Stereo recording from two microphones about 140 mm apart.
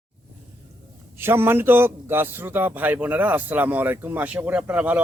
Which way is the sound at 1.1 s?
15° right (ahead or behind).